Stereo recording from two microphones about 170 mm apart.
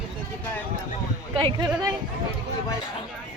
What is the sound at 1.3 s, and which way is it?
Speech, 30° right (ahead or behind).